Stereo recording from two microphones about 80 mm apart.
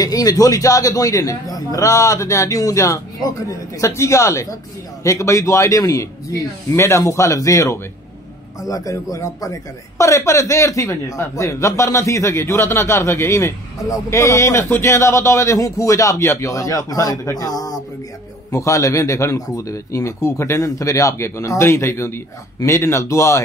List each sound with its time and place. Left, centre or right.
0.0 s a man's voice: left
18.5 s a man's voice: left